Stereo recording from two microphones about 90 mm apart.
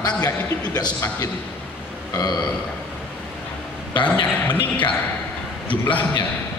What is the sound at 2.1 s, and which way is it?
Speech, 50° left (ahead or behind).